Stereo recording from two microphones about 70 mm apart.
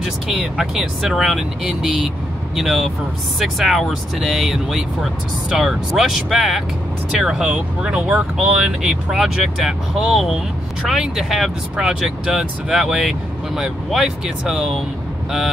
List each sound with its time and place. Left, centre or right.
0.6 s speech: centre